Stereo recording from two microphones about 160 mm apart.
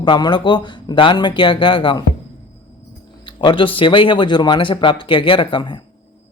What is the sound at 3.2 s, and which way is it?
Speech, 30° left (ahead or behind).